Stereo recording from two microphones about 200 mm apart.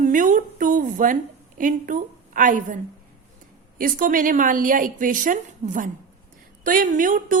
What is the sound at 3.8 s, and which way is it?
A woman's voice, 45° right (ahead or behind).